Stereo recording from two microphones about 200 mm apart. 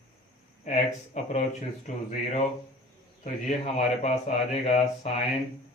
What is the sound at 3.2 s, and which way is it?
Speech, 40° left (ahead or behind).